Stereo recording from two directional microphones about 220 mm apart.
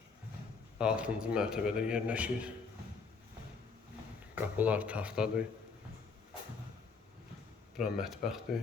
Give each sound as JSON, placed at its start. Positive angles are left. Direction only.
{"t": 0.8, "sound": "a man's voice", "side_deg": -5}
{"t": 4.4, "sound": "speech", "side_deg": -5}
{"t": 7.8, "sound": "a man's voice", "side_deg": 0}